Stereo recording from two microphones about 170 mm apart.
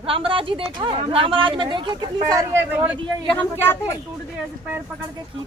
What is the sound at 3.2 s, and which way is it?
Speech, 10° left (ahead or behind).